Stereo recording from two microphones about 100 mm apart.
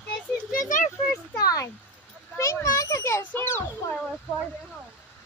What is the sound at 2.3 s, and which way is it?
A child's voice, 30° left (ahead or behind).